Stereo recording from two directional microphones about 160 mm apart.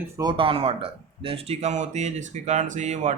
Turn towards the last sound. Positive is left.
turn(degrees=-45)  # may be behind; listen again after turning